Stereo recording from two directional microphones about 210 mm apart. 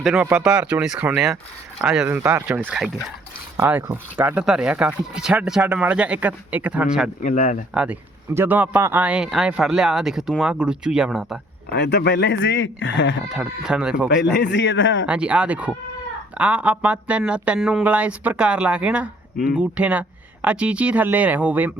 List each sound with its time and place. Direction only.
0.0 s speech: 5° right (ahead or behind)
7.2 s speech: 40° left (ahead or behind)
7.7 s speech: 5° right (ahead or behind)
11.7 s speech: 55° left (ahead or behind)
13.2 s speech: 5° right (ahead or behind)
14.2 s speech: 55° left (ahead or behind)
15.0 s speech: 5° right (ahead or behind)